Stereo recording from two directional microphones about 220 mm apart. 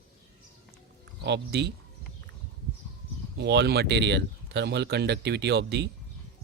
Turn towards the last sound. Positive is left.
turn(degrees=-50)  # may be behind; listen again after turning